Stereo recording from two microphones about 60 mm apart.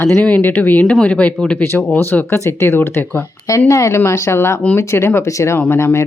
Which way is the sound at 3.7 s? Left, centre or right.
Left.